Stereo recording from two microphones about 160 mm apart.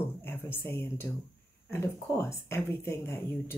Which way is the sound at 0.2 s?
15° left (ahead or behind).